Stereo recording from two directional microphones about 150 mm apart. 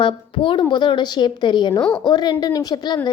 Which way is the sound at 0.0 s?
30° left (ahead or behind).